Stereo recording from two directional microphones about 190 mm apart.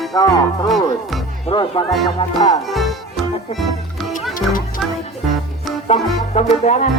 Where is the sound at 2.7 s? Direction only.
Centre (ahead or behind).